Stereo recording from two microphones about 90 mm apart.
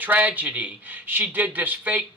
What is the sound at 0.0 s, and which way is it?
Speech, 20° right (ahead or behind).